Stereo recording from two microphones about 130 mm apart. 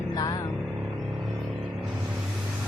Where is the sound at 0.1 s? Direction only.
30° left (ahead or behind).